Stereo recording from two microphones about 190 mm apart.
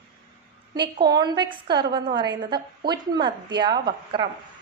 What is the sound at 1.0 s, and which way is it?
A woman's voice, 20° right (ahead or behind).